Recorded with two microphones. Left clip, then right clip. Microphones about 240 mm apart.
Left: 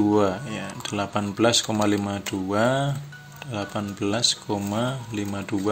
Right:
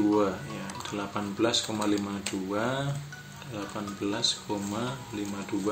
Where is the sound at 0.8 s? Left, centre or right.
Left.